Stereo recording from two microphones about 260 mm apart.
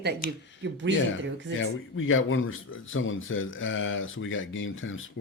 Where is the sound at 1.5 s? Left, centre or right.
Left.